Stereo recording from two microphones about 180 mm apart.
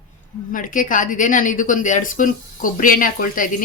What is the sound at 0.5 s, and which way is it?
Speech, 45° left (ahead or behind).